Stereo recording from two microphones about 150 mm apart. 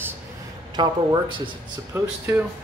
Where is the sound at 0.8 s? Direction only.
30° right (ahead or behind).